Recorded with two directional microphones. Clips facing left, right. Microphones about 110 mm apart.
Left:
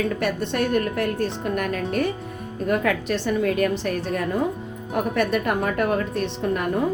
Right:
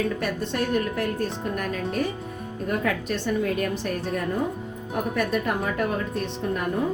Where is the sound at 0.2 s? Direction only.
65° left (ahead or behind).